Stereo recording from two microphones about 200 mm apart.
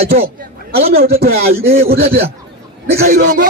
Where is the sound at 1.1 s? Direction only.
50° right (ahead or behind).